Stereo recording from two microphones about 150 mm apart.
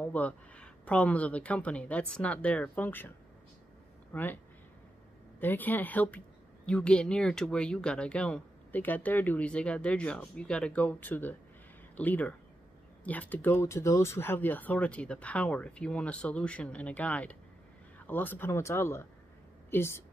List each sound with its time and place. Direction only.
0.0 s a woman's voice: 10° left (ahead or behind)
4.1 s speech: 10° left (ahead or behind)
5.4 s a woman's voice: 10° left (ahead or behind)